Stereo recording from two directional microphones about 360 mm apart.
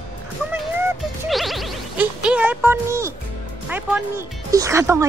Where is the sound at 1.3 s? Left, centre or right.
Centre.